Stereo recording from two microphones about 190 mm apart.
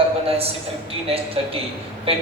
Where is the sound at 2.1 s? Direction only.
30° right (ahead or behind).